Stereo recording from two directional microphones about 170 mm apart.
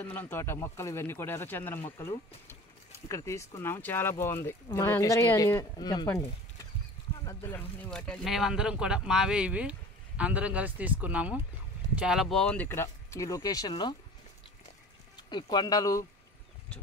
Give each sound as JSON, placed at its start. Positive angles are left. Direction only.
{"t": 0.0, "sound": "speech", "side_deg": 10}
{"t": 7.2, "sound": "speech", "side_deg": 10}
{"t": 15.1, "sound": "speech", "side_deg": 25}